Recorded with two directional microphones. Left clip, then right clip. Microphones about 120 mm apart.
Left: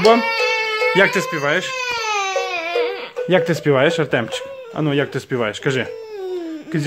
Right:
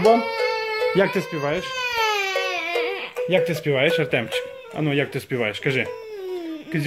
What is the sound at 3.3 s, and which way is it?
Speech, 55° left (ahead or behind).